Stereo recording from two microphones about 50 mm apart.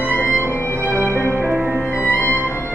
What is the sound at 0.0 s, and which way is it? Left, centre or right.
Music, left.